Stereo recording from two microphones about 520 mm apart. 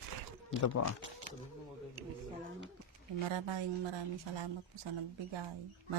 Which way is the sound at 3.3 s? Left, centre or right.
Right.